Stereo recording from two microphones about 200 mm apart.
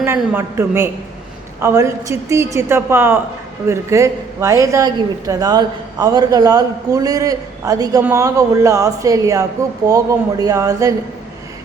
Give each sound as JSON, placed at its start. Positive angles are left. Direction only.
{"t": 0.0, "sound": "speech", "side_deg": -10}